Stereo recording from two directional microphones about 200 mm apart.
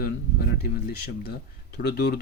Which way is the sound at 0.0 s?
50° left (ahead or behind).